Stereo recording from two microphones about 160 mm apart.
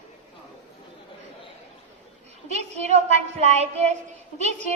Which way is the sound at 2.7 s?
45° right (ahead or behind).